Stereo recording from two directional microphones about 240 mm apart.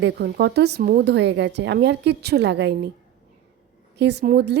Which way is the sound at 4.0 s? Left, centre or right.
Right.